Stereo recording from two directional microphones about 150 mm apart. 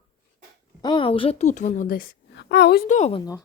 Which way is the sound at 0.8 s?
30° left (ahead or behind).